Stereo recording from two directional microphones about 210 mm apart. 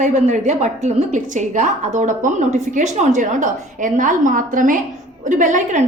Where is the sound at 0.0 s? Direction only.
35° right (ahead or behind).